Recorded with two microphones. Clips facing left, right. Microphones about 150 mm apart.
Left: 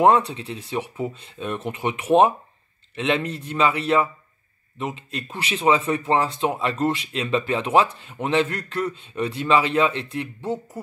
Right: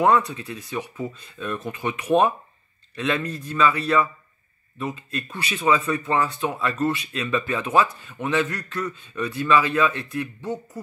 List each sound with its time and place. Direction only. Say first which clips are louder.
0.3 s speech: left 2 dB; 30° left (ahead or behind)